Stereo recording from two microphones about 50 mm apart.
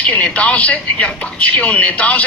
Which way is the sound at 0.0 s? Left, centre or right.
Left.